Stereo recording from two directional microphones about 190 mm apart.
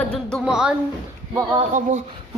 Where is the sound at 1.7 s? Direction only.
40° right (ahead or behind).